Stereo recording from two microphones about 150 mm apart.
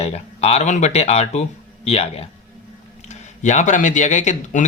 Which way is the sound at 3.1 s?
50° left (ahead or behind).